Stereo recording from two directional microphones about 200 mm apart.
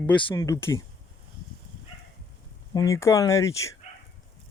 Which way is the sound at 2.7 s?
15° left (ahead or behind).